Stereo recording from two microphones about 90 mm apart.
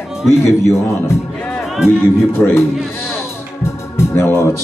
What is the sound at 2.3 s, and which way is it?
Speech, 25° left (ahead or behind).